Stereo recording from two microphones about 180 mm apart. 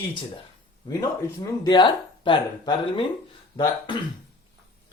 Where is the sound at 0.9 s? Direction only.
20° left (ahead or behind).